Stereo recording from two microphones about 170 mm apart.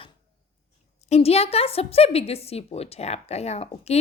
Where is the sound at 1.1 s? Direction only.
35° left (ahead or behind).